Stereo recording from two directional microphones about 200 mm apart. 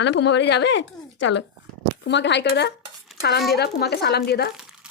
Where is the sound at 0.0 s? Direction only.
60° left (ahead or behind).